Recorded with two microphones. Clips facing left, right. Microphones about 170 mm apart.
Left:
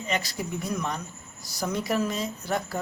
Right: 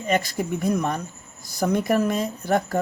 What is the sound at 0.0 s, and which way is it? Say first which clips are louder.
A woman's voice: right 7 dB; 50° right (ahead or behind).